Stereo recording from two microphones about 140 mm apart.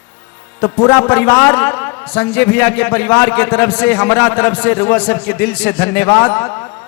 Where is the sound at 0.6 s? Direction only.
15° left (ahead or behind).